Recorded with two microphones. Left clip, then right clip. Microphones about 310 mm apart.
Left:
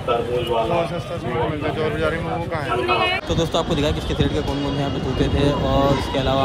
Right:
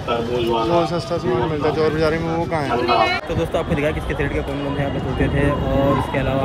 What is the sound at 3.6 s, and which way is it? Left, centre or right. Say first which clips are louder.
Speech: right 1 dB; centre.